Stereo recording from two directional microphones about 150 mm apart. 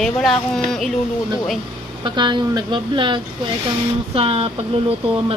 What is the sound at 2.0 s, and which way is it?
Speech, 30° right (ahead or behind).